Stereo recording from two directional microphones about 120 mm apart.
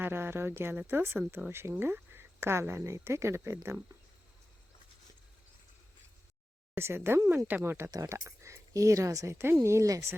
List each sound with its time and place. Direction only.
0.0 s speech: 20° right (ahead or behind)
6.7 s speech: 20° right (ahead or behind)